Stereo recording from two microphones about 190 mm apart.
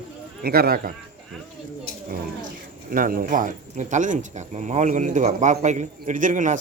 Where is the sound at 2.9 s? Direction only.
45° right (ahead or behind).